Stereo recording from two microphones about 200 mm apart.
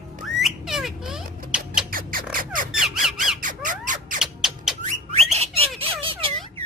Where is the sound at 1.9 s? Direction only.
45° right (ahead or behind).